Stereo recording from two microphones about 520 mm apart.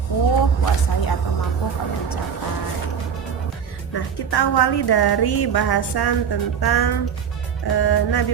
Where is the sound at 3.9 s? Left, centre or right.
Left.